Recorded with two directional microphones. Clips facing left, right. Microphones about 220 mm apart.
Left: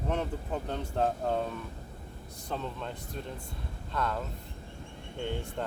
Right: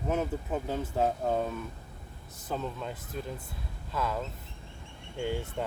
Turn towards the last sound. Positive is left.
turn(degrees=-5)  # may be behind; listen again after turning